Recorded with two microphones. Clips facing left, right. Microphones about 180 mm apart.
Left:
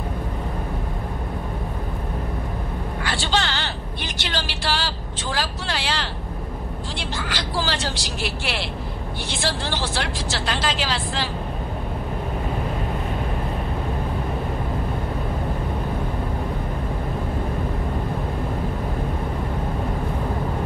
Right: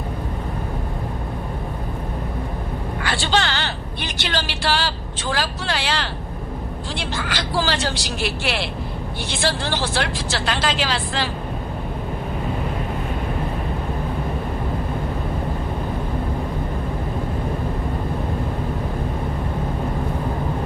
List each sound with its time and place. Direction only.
3.0 s a sound: 65° right (ahead or behind)
7.0 s vehicle: 65° right (ahead or behind)
9.4 s speech: 65° right (ahead or behind)